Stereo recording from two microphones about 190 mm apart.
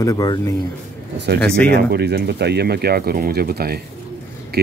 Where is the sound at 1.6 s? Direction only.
60° right (ahead or behind).